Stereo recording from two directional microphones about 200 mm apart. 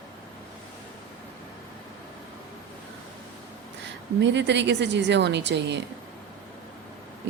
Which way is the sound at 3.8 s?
60° right (ahead or behind).